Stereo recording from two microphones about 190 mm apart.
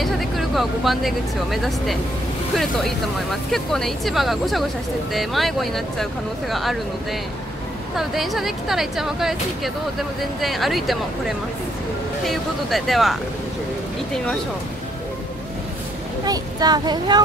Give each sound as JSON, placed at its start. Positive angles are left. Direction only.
{"t": 0.0, "sound": "speech", "side_deg": 0}
{"t": 7.9, "sound": "speech", "side_deg": 0}
{"t": 16.3, "sound": "speech", "side_deg": -20}